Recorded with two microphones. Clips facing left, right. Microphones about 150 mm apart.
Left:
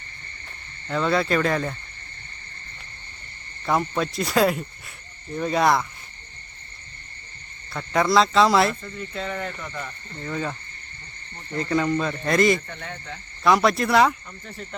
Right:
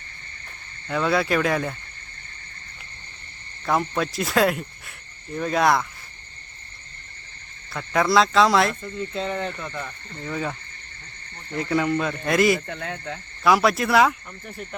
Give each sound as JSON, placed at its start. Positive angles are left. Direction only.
{"t": 0.9, "sound": "cricket", "side_deg": -5}
{"t": 3.7, "sound": "cricket", "side_deg": 0}
{"t": 7.7, "sound": "cricket", "side_deg": 0}
{"t": 9.0, "sound": "speech", "side_deg": -25}
{"t": 10.2, "sound": "cricket", "side_deg": -5}
{"t": 11.5, "sound": "cricket", "side_deg": -5}
{"t": 12.5, "sound": "speech", "side_deg": -70}
{"t": 13.4, "sound": "cricket", "side_deg": 0}
{"t": 14.4, "sound": "speech", "side_deg": -10}